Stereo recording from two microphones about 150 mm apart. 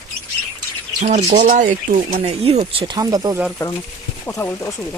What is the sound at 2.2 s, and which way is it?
Speech, 40° right (ahead or behind).